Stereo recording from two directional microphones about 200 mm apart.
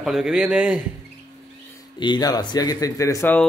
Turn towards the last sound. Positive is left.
turn(degrees=10)  # may be behind; listen again after turning